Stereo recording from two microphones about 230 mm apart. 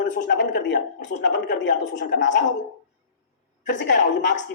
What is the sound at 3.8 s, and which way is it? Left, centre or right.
Speech, left.